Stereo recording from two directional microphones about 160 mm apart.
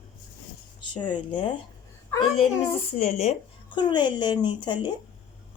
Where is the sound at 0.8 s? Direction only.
30° left (ahead or behind).